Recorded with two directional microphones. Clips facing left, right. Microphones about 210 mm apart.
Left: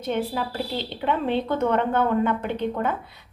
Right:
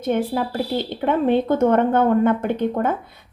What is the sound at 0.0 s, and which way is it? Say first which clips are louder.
Speech: right 5 dB; 50° right (ahead or behind).